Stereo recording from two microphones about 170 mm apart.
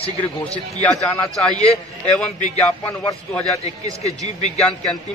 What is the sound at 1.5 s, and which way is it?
Speech, 35° left (ahead or behind).